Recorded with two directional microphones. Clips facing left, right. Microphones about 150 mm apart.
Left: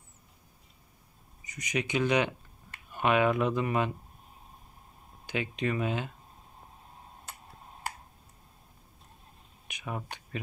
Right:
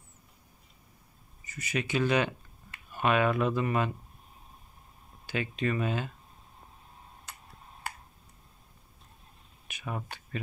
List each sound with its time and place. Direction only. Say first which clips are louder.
1.4 s speech: left 1 dB; 15° left (ahead or behind)
5.2 s speech: even; 15° left (ahead or behind)
9.7 s a sound: even; 15° left (ahead or behind)